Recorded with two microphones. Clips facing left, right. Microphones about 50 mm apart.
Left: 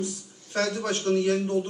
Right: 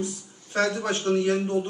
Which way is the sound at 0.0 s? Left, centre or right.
Right.